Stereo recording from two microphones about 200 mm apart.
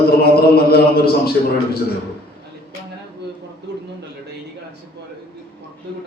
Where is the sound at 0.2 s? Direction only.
50° left (ahead or behind).